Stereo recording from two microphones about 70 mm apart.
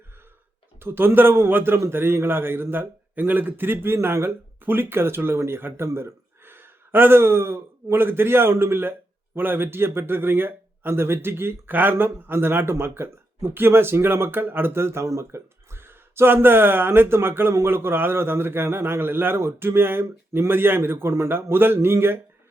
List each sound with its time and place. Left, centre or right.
0.8 s a man's voice: right